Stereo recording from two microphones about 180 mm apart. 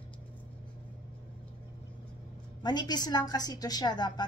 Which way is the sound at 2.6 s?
25° left (ahead or behind).